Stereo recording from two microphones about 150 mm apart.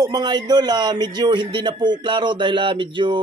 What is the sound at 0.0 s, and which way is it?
A man's voice, 25° right (ahead or behind).